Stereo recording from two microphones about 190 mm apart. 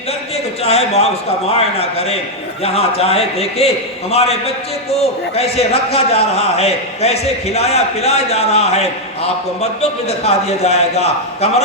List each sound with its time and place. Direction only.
0.6 s a man's voice: 35° left (ahead or behind)